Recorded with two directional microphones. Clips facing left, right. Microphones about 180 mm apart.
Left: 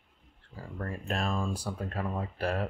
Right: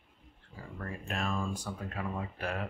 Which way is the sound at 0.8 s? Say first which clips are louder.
Left 3 dB; 35° left (ahead or behind).